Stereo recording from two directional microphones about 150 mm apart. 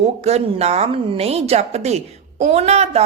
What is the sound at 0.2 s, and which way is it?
Speech, 45° right (ahead or behind).